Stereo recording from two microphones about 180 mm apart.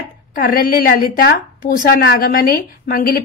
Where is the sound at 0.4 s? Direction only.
50° left (ahead or behind).